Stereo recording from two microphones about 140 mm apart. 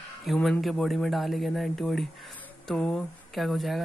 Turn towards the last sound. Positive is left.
turn(degrees=0)  # may be behind; listen again after turning